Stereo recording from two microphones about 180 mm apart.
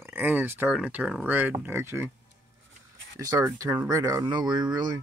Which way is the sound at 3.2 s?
15° right (ahead or behind).